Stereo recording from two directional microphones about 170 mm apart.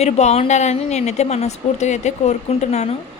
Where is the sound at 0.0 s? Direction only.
40° left (ahead or behind).